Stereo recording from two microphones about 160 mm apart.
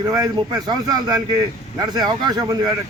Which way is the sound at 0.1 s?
25° right (ahead or behind).